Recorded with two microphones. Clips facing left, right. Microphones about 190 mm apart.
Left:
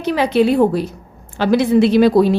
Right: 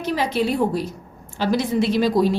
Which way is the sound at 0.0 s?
65° left (ahead or behind).